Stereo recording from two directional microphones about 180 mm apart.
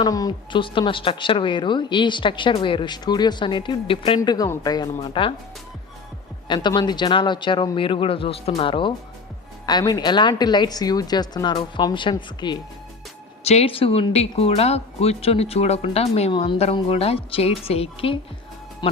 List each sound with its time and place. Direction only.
0.0 s a woman's voice: 20° left (ahead or behind)
4.2 s a woman's voice: 20° left (ahead or behind)
6.5 s a woman's voice: 25° left (ahead or behind)
13.4 s a woman's voice: 35° left (ahead or behind)